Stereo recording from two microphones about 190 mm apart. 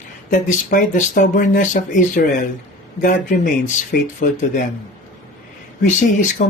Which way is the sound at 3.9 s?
50° left (ahead or behind).